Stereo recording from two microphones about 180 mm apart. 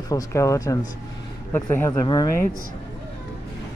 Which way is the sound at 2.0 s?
20° left (ahead or behind).